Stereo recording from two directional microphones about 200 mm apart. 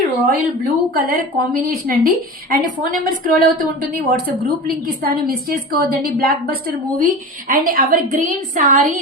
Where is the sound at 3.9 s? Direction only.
50° right (ahead or behind).